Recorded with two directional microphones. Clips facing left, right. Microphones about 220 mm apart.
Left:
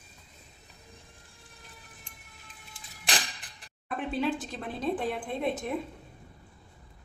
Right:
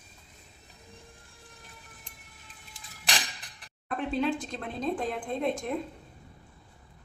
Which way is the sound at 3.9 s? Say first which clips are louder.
Right 1 dB; centre (ahead or behind).